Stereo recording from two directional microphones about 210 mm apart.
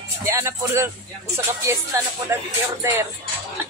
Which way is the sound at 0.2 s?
15° right (ahead or behind).